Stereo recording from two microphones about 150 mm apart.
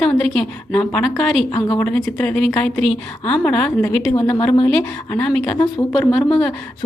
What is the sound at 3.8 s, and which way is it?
A woman's voice, 20° left (ahead or behind).